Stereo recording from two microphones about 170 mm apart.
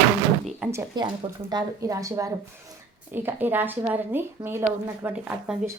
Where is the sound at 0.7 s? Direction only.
20° right (ahead or behind).